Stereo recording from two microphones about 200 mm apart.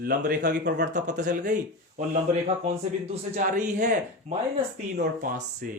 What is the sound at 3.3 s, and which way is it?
Speech, 35° right (ahead or behind).